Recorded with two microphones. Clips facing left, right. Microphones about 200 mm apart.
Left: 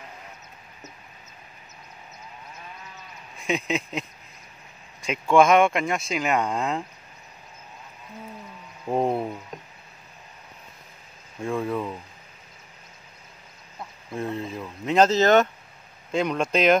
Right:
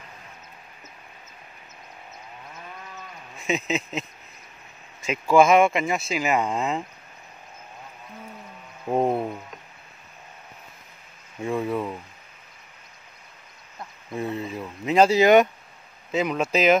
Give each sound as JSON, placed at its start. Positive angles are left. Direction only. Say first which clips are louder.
{"t": 3.3, "sound": "speech", "louder": "even", "side_deg": -5}
{"t": 5.0, "sound": "speech", "louder": "right 1 dB", "side_deg": -5}
{"t": 8.9, "sound": "speech", "louder": "right 1 dB", "side_deg": 0}
{"t": 11.4, "sound": "speech", "louder": "right 1 dB", "side_deg": -5}
{"t": 13.7, "sound": "speech", "louder": "right 1 dB", "side_deg": -5}